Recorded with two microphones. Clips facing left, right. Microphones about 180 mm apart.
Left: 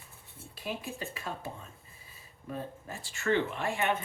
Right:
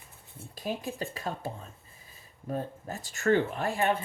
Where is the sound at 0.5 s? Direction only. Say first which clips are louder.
Right 4 dB; 40° right (ahead or behind).